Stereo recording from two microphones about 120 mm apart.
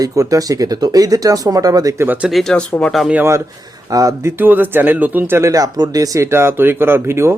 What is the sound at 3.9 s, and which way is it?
Speech, 30° right (ahead or behind).